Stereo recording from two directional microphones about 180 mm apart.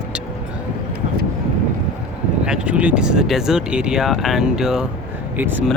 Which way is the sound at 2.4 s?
5° right (ahead or behind).